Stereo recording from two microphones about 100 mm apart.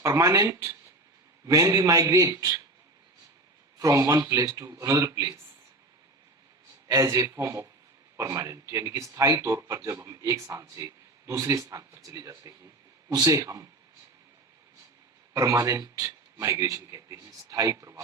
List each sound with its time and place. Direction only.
0.0 s speech: 30° right (ahead or behind)
3.8 s speech: 35° right (ahead or behind)
6.8 s speech: 30° right (ahead or behind)
15.3 s a man's voice: 35° right (ahead or behind)